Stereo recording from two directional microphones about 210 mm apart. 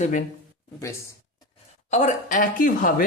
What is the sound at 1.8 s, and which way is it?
Speech, 35° left (ahead or behind).